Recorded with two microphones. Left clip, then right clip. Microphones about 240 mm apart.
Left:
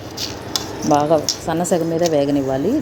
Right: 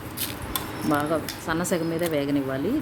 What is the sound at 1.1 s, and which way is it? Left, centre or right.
Speech, centre.